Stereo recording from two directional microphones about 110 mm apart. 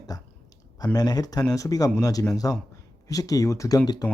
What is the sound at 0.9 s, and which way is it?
Speech, 35° left (ahead or behind).